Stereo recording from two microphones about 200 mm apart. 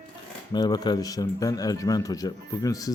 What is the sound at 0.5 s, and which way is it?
Speech, 20° left (ahead or behind).